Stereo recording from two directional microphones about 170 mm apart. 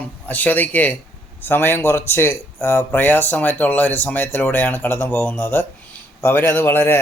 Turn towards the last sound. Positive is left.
turn(degrees=15)  # may be behind; listen again after turning